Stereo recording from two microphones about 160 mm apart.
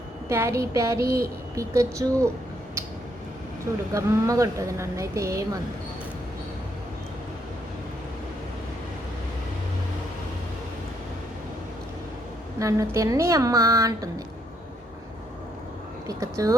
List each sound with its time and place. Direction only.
0.3 s a sound: 15° right (ahead or behind)
1.1 s speech: 20° right (ahead or behind)
3.9 s speech: 20° right (ahead or behind)
12.5 s speech: 20° right (ahead or behind)
16.0 s speech: 20° right (ahead or behind)